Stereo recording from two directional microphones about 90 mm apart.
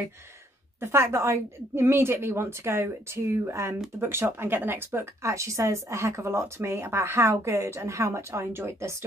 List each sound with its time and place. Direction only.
0.7 s a woman's voice: 25° right (ahead or behind)